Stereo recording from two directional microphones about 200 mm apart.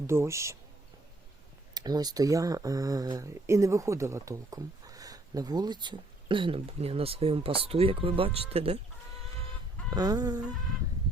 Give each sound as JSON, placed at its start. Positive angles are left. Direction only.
{"t": 0.1, "sound": "speech", "side_deg": -15}
{"t": 1.7, "sound": "speech", "side_deg": -20}
{"t": 9.9, "sound": "speech", "side_deg": -20}